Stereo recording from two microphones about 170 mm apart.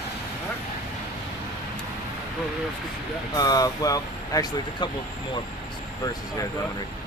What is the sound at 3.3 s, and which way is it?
Speech, 20° left (ahead or behind).